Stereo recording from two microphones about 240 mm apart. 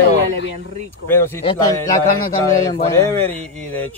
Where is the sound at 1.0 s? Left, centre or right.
Centre.